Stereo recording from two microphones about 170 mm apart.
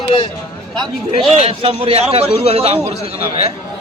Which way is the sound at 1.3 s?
35° right (ahead or behind).